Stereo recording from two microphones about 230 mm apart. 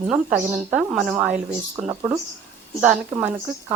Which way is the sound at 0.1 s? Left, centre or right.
Centre.